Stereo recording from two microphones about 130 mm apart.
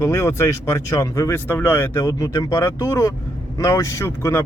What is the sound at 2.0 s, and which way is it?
Speech, 30° left (ahead or behind).